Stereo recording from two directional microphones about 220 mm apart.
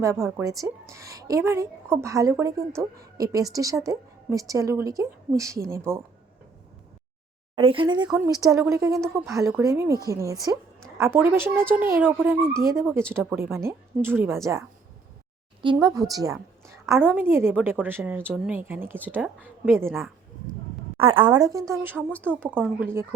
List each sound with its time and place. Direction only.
0.0 s a woman's voice: 15° right (ahead or behind)
7.5 s a woman's voice: 25° right (ahead or behind)
15.6 s a woman's voice: 20° right (ahead or behind)
21.0 s a woman's voice: 25° right (ahead or behind)